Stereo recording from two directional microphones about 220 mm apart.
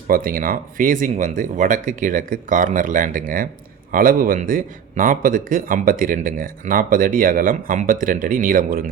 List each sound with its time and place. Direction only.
0.1 s a man's voice: 40° right (ahead or behind)